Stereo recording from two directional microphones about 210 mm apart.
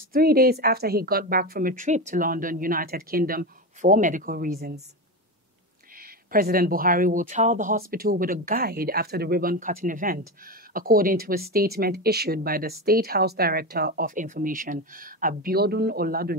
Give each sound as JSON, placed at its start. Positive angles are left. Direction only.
{"t": 0.1, "sound": "speech", "side_deg": -45}
{"t": 5.9, "sound": "speech", "side_deg": -45}